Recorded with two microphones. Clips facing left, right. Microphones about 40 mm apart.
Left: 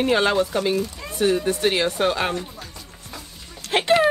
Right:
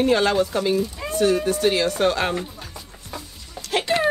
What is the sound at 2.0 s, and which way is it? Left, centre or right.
Speech, centre.